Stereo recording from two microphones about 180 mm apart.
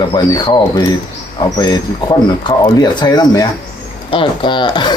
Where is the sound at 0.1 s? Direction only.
25° left (ahead or behind).